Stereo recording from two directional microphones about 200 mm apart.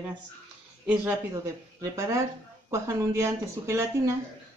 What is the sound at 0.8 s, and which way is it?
Speech, 5° right (ahead or behind).